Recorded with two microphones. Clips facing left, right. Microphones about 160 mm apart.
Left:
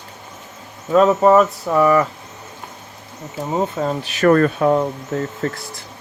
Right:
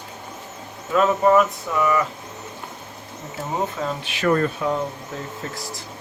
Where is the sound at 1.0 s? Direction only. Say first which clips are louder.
Left 4 dB; 40° left (ahead or behind).